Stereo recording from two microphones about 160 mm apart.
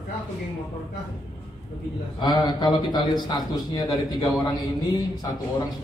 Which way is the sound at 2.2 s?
25° left (ahead or behind).